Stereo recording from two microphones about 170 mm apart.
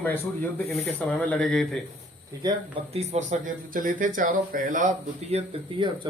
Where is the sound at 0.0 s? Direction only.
15° left (ahead or behind).